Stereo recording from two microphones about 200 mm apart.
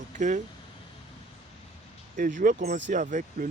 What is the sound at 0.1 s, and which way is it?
Speech, 40° right (ahead or behind).